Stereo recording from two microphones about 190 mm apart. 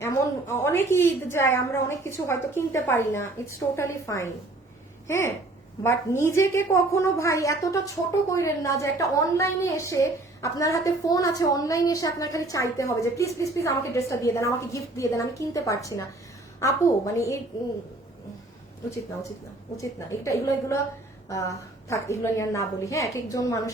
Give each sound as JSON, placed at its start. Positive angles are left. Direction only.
{"t": 0.0, "sound": "a woman's voice", "side_deg": 15}
{"t": 19.7, "sound": "a woman's voice", "side_deg": 15}